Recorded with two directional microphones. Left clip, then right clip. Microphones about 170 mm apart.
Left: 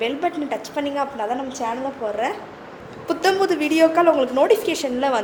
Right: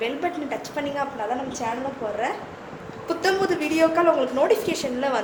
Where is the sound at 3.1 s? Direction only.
50° left (ahead or behind).